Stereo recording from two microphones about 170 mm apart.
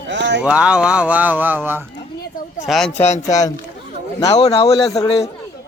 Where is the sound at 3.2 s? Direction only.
20° left (ahead or behind).